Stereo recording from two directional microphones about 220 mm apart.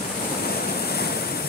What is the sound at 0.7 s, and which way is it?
Vehicle, 45° left (ahead or behind).